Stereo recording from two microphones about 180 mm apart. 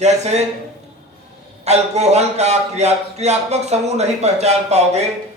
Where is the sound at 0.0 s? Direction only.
40° right (ahead or behind).